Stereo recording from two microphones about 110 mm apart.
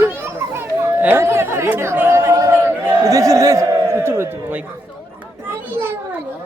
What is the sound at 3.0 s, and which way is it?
A man's voice, 30° right (ahead or behind).